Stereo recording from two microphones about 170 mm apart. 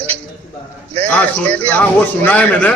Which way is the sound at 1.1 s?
10° left (ahead or behind).